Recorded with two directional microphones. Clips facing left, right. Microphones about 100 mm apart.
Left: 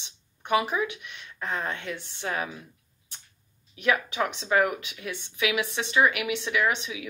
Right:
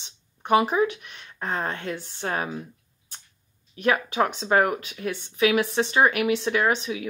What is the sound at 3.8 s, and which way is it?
Speech, 40° right (ahead or behind).